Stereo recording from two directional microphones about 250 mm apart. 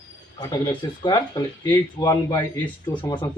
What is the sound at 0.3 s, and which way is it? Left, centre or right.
Speech, centre.